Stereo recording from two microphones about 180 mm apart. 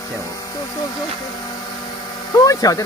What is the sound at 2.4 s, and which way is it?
Speech, 20° left (ahead or behind).